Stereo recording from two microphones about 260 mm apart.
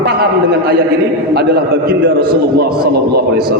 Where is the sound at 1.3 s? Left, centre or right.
Right.